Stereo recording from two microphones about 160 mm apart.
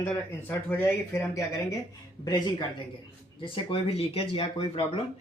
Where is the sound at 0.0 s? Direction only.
15° left (ahead or behind); by 4.9 s 35° left (ahead or behind).